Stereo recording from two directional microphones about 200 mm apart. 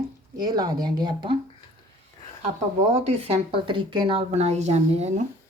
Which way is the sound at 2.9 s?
35° right (ahead or behind).